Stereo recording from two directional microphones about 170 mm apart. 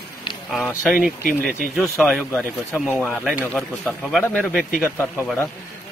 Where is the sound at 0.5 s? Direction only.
Centre (ahead or behind).